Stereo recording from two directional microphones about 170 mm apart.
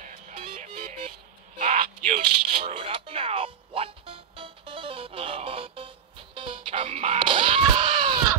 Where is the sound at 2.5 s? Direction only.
35° right (ahead or behind).